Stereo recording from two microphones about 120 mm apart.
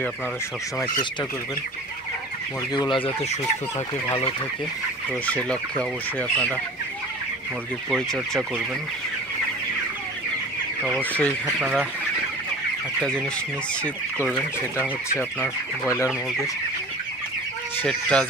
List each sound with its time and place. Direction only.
2.7 s speech: 40° left (ahead or behind)
5.2 s speech: 10° left (ahead or behind)
7.9 s speech: centre (ahead or behind)
11.0 s speech: 10° left (ahead or behind)
11.6 s speech: centre (ahead or behind)
17.8 s speech: 5° left (ahead or behind)